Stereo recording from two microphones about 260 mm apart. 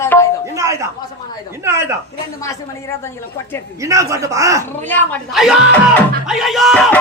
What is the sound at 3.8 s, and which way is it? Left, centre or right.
Speech, centre.